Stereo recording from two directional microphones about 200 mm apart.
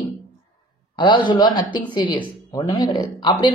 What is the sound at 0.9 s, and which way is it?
A man's voice, 25° left (ahead or behind).